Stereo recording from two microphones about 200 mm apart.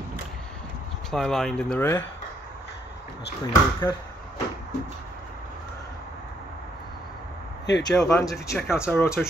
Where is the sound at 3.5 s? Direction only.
20° left (ahead or behind).